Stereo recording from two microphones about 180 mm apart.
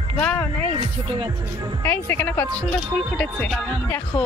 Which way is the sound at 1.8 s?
10° left (ahead or behind).